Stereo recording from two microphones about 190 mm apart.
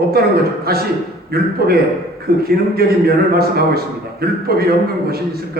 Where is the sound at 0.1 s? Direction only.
55° right (ahead or behind).